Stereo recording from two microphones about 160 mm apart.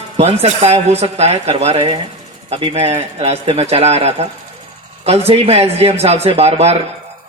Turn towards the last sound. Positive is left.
turn(degrees=-40)  # may be behind; listen again after turning